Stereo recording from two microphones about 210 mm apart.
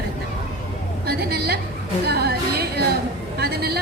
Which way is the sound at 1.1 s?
50° right (ahead or behind).